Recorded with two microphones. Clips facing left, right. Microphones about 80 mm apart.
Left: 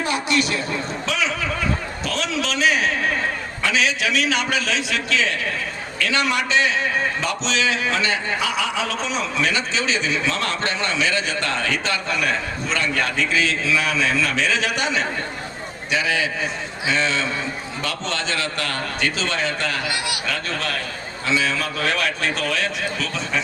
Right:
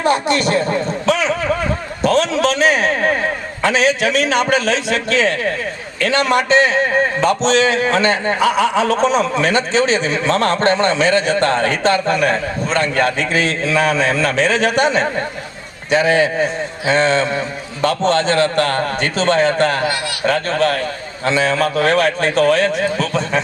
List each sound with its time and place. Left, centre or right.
0.0 s speech: right
2.0 s a sound: right
6.0 s a man's voice: right